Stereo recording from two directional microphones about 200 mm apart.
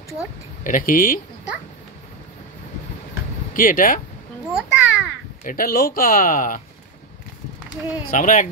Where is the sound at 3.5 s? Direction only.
45° left (ahead or behind).